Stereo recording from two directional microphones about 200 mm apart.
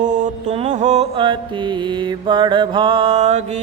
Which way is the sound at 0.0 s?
40° right (ahead or behind).